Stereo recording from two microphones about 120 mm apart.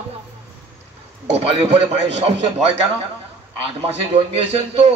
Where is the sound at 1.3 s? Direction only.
50° right (ahead or behind).